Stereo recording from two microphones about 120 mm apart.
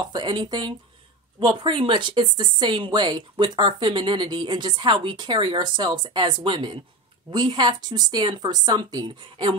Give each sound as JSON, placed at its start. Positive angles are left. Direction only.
{"t": 0.0, "sound": "a woman's voice", "side_deg": -40}